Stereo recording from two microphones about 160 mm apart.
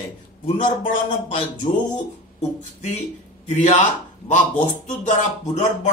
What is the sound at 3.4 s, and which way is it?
Speech, 50° left (ahead or behind).